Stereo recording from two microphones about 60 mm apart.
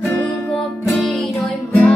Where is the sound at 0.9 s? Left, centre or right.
Centre.